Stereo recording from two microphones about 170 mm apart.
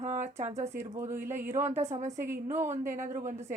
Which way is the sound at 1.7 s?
40° right (ahead or behind).